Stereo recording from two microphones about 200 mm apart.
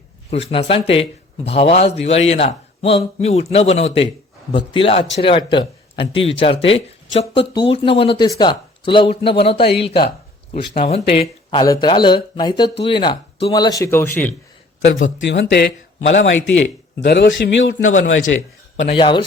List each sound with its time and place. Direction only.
0.3 s a man's voice: 30° left (ahead or behind)
11.6 s speech: 20° left (ahead or behind)
14.8 s a man's voice: 70° left (ahead or behind)
16.0 s a man's voice: 65° left (ahead or behind)
18.8 s speech: 30° left (ahead or behind)